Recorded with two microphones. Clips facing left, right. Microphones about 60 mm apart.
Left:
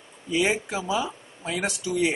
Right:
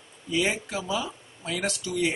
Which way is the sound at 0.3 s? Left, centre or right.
Centre.